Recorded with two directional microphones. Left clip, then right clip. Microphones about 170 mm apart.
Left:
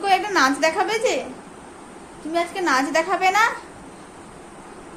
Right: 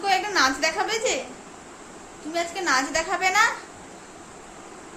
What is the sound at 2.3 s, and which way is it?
A woman's voice, 35° left (ahead or behind).